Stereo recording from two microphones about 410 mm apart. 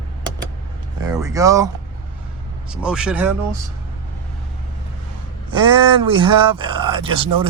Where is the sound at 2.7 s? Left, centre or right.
Centre.